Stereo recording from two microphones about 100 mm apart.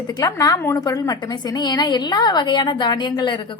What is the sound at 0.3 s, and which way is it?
A woman's voice, 35° left (ahead or behind).